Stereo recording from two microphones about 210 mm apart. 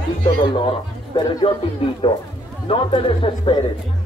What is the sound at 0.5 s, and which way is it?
Speech, 25° left (ahead or behind).